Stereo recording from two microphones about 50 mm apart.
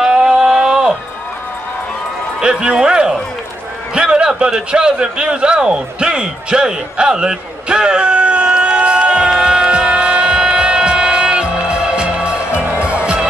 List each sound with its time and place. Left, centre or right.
0.0 s a sound: centre
2.4 s a man's voice: centre
9.3 s music: centre